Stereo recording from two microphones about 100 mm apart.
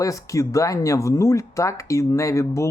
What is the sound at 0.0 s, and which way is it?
Speech, 35° left (ahead or behind).